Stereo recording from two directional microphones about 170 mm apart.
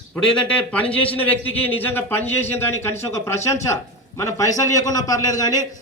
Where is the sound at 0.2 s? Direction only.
5° left (ahead or behind).